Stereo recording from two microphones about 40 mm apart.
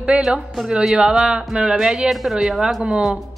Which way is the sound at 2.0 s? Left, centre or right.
Centre.